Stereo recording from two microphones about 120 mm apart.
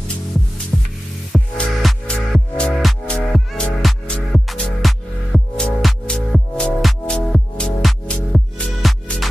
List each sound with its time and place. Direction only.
0.7 s music: 5° right (ahead or behind)